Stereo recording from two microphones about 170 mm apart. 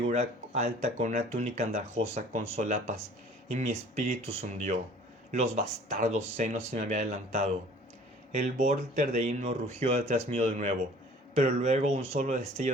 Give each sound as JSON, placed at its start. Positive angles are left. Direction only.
{"t": 0.0, "sound": "speech", "side_deg": -40}